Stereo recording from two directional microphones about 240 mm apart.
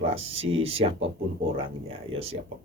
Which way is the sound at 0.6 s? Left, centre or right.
Right.